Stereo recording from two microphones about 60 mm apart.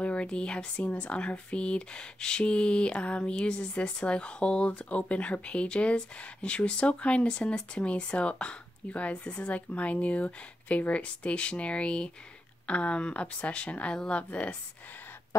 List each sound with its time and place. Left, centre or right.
0.0 s speech: centre